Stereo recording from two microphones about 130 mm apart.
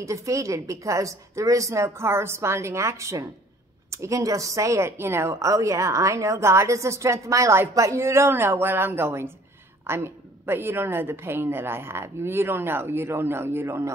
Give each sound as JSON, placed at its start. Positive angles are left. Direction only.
{"t": 0.0, "sound": "a woman's voice", "side_deg": -25}